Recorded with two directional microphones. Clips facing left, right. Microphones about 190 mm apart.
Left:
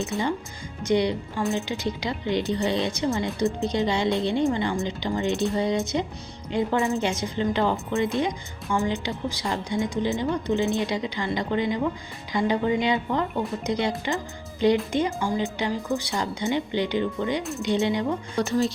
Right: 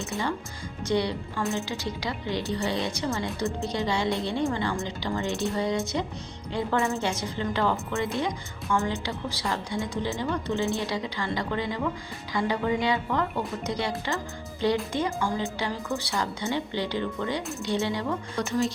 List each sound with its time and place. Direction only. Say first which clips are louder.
0.9 s a woman's voice: left 4 dB; 20° left (ahead or behind)
18.3 s speech: left 4 dB; 35° left (ahead or behind)